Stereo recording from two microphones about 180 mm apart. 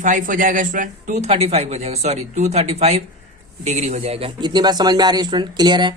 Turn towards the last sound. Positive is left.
turn(degrees=-25)  # may be behind; listen again after turning